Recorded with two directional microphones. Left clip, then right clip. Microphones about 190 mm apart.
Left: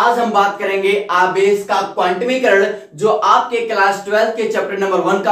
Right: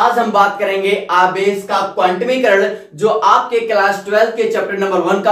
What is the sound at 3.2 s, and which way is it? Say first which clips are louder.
A man's voice: right 3 dB; 10° right (ahead or behind).